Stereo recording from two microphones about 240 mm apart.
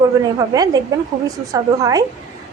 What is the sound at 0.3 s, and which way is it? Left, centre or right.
A woman's voice, centre.